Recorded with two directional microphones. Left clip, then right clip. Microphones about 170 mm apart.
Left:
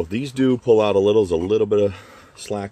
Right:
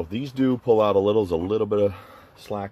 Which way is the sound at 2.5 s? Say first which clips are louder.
Left 3 dB; 55° left (ahead or behind).